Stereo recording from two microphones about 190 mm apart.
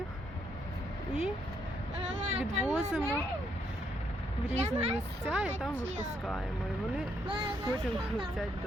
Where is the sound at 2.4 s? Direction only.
5° right (ahead or behind).